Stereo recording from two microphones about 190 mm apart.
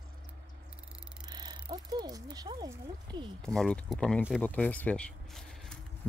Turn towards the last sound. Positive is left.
turn(degrees=5)  # may be behind; listen again after turning